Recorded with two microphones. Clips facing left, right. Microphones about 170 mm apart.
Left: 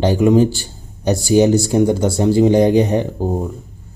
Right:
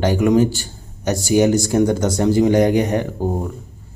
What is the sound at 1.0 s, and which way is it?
Speech, 35° left (ahead or behind).